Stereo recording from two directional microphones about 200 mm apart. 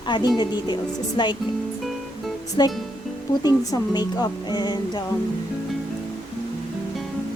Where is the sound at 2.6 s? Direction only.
20° left (ahead or behind).